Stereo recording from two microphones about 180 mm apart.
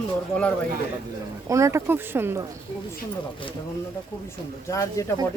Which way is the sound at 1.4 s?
15° right (ahead or behind).